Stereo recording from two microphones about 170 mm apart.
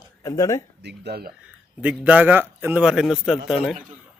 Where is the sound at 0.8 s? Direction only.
80° right.